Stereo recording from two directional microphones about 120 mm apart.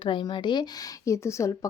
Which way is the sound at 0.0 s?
40° left (ahead or behind).